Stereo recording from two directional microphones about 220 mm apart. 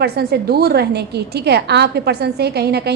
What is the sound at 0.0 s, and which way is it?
A woman's voice, 45° right (ahead or behind).